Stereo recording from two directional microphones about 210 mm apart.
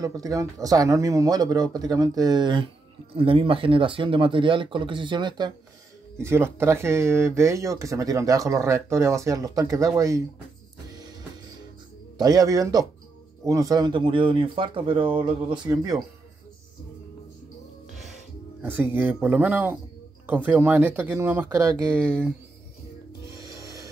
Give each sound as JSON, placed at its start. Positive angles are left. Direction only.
{"t": 0.0, "sound": "speech", "side_deg": -15}
{"t": 12.2, "sound": "speech", "side_deg": -20}
{"t": 18.6, "sound": "speech", "side_deg": -10}
{"t": 23.2, "sound": "rub", "side_deg": -15}